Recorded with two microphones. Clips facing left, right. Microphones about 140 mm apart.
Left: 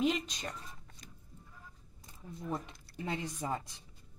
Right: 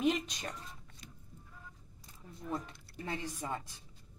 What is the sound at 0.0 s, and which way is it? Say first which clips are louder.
Speech: even; centre (ahead or behind).